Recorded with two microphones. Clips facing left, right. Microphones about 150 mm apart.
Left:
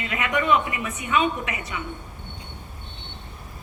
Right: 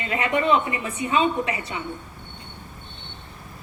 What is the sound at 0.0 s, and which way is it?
A woman's voice, 30° right (ahead or behind).